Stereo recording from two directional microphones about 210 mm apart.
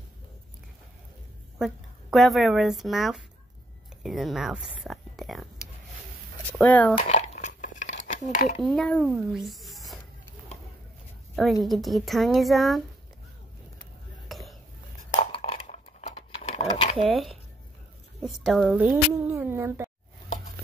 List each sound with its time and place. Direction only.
1.6 s speech: centre (ahead or behind)
6.6 s speech: 5° left (ahead or behind)
7.0 s a sound: 35° left (ahead or behind)
8.3 s speech: 40° left (ahead or behind)
8.6 s speech: centre (ahead or behind)
11.3 s a woman's voice: centre (ahead or behind)
14.3 s a sound: centre (ahead or behind)
15.1 s a sound: 30° left (ahead or behind)
16.9 s a woman's voice: centre (ahead or behind)